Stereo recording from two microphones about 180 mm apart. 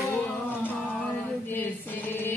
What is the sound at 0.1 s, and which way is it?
Music, 10° left (ahead or behind).